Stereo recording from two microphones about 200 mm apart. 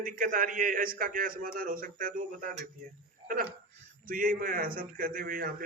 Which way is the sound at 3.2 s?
45° right (ahead or behind).